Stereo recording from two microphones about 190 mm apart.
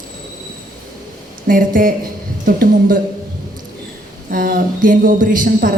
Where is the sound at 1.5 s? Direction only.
45° right (ahead or behind).